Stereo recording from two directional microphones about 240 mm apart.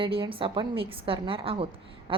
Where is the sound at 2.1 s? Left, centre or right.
Right.